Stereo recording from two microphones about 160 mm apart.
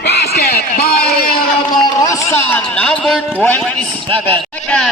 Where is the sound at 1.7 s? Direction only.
20° left (ahead or behind).